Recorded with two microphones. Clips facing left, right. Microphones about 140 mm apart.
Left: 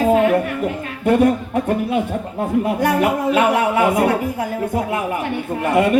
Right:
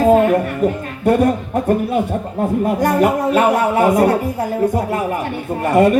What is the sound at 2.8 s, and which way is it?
A woman's voice, 40° right (ahead or behind).